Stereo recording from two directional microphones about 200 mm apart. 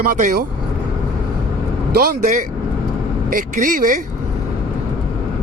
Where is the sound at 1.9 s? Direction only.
45° right (ahead or behind).